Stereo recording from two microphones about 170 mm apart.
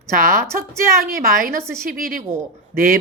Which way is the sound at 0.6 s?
60° right (ahead or behind).